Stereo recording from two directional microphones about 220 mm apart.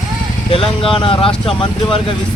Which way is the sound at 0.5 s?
25° left (ahead or behind).